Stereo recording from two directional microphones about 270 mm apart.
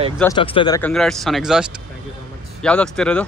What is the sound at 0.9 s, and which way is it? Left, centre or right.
Speech, centre.